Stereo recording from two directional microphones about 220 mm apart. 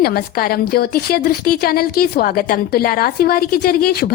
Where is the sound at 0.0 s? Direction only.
45° left (ahead or behind).